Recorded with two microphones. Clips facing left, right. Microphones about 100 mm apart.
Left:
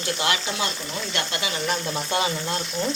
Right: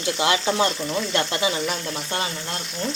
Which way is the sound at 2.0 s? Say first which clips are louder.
Left 5 dB; 15° left (ahead or behind).